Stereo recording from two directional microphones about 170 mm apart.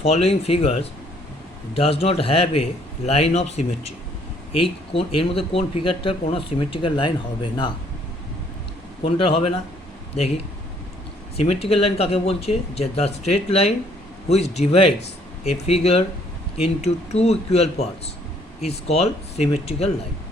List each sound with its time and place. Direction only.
0.0 s speech: 35° left (ahead or behind)
9.0 s speech: 30° left (ahead or behind)
11.3 s speech: 35° left (ahead or behind)